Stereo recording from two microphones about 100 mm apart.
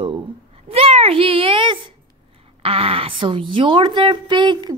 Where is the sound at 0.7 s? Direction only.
85° right; by 1.8 s 60° right (ahead or behind).